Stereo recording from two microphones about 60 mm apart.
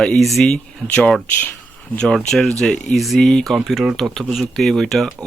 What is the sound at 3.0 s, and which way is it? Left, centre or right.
Speech, centre.